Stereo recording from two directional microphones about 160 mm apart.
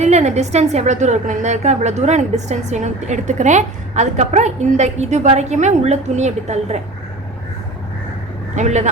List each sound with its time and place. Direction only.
0.0 s a woman's voice: 45° right (ahead or behind)
8.5 s a woman's voice: 45° right (ahead or behind)